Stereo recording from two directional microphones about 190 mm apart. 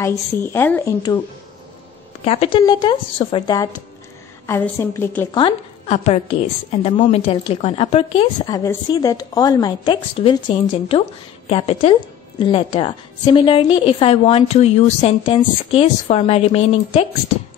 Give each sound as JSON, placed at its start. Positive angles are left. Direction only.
{"t": 0.5, "sound": "a woman's voice", "side_deg": 10}
{"t": 2.2, "sound": "a woman's voice", "side_deg": 30}
{"t": 6.0, "sound": "a woman's voice", "side_deg": 35}
{"t": 8.5, "sound": "a woman's voice", "side_deg": 20}